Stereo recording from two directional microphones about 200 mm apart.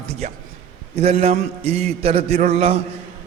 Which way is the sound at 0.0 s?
35° right (ahead or behind).